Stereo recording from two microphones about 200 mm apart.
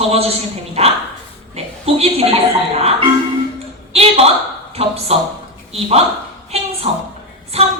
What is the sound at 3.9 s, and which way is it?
Speech, 30° right (ahead or behind).